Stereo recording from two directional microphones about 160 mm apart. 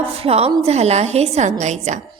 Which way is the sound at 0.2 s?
40° right (ahead or behind).